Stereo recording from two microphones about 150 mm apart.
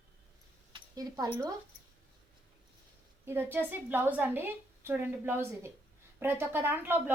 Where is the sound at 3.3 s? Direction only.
15° right (ahead or behind).